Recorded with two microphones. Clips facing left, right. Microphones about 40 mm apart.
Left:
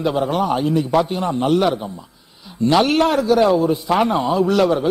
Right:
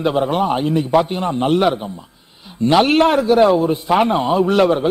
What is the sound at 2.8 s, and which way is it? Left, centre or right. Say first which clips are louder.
A man's voice: right 2 dB; right.